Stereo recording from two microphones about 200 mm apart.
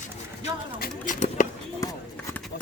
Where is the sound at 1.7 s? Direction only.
15° left (ahead or behind).